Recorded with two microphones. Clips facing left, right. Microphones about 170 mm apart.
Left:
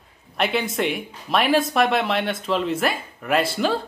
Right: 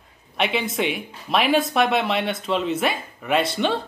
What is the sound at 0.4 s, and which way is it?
A woman's voice, centre (ahead or behind).